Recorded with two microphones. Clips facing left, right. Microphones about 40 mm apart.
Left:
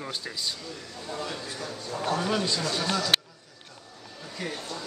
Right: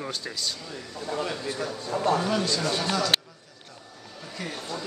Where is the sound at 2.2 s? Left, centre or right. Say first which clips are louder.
Right 1 dB; centre.